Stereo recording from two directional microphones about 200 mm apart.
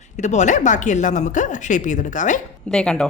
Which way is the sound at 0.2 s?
35° left (ahead or behind).